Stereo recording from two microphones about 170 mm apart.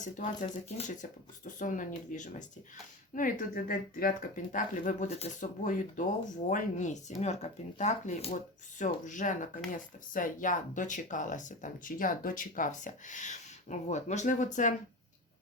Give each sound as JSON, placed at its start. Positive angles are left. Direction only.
{"t": 0.0, "sound": "speech", "side_deg": 50}
{"t": 1.5, "sound": "speech", "side_deg": 50}